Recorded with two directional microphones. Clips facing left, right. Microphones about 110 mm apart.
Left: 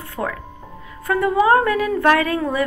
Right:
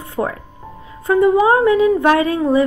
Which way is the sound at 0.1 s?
25° right (ahead or behind).